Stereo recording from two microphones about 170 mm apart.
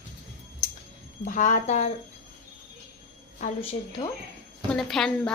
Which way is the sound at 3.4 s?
45° left (ahead or behind).